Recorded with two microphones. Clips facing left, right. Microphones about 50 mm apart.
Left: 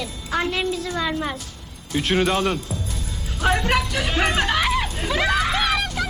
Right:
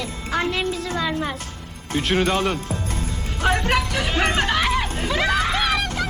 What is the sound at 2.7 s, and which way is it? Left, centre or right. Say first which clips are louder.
Music: right 3 dB; right.